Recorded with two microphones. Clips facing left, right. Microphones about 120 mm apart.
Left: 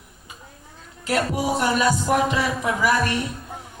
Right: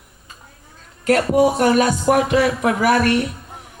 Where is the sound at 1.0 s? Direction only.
55° right (ahead or behind).